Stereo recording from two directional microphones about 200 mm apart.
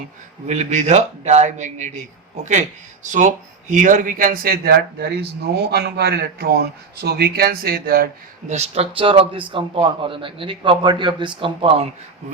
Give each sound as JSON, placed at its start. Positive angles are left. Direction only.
{"t": 0.4, "sound": "a man's voice", "side_deg": -35}
{"t": 8.5, "sound": "a man's voice", "side_deg": -30}